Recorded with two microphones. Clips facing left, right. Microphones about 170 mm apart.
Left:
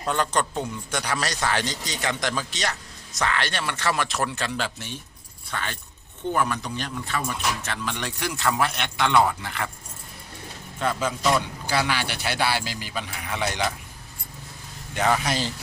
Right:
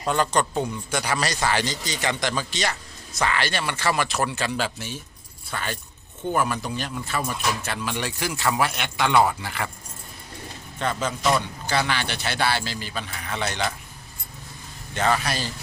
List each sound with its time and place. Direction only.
0.0 s speech: centre (ahead or behind)
10.8 s a man's voice: 5° left (ahead or behind)
14.9 s a man's voice: 15° left (ahead or behind)